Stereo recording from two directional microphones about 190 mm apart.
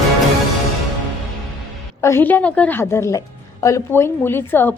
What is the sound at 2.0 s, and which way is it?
A woman's voice, 15° left (ahead or behind).